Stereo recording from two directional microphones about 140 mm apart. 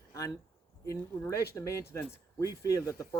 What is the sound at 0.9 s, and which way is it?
Speech, 20° left (ahead or behind).